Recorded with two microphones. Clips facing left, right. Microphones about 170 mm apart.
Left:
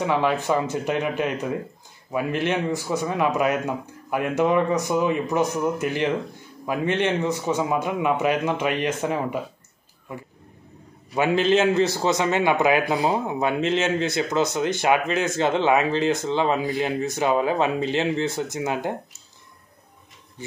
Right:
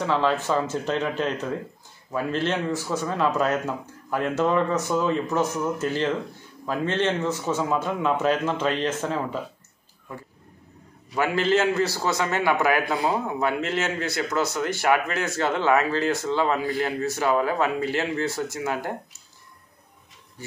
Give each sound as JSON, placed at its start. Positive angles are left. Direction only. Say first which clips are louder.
{"t": 0.0, "sound": "a man's voice", "louder": "left 1 dB", "side_deg": 15}
{"t": 11.1, "sound": "a man's voice", "louder": "left 3 dB", "side_deg": 20}